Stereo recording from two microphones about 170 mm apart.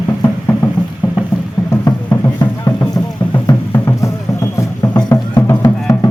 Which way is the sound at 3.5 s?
15° left (ahead or behind).